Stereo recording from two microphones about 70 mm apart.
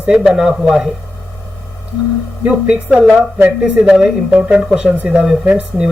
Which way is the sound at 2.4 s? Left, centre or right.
Centre.